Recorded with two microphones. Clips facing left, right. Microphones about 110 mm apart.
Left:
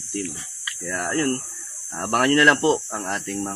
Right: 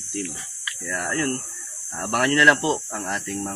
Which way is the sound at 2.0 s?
45° left (ahead or behind).